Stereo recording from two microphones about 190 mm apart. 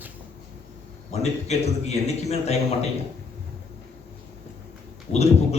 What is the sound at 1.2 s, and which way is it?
A man's voice, 35° left (ahead or behind).